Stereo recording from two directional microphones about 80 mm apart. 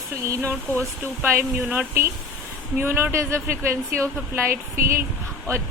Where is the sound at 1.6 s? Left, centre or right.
Centre.